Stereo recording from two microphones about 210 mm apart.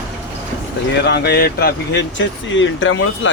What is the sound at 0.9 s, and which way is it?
Speech, 55° left (ahead or behind).